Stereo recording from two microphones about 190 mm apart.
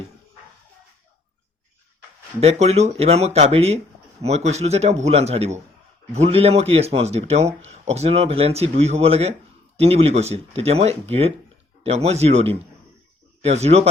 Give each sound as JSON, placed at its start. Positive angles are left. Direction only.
{"t": 2.4, "sound": "speech", "side_deg": -35}